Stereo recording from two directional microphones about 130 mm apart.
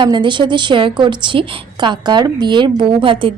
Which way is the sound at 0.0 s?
35° right (ahead or behind).